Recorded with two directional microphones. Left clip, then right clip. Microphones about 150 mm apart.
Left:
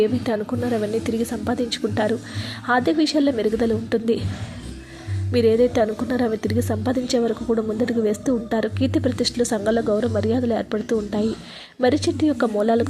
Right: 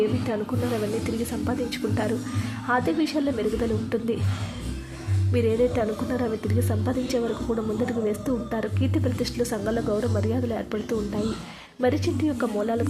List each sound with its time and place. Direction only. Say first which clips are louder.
0.3 s a woman's voice: left 4 dB; 20° left (ahead or behind)
5.3 s a woman's voice: left 6 dB; 25° left (ahead or behind)